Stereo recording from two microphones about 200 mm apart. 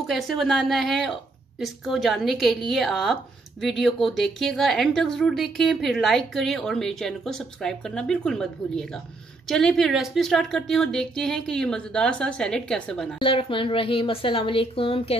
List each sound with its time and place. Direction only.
0.0 s a woman's voice: centre (ahead or behind)
13.2 s a woman's voice: 25° left (ahead or behind)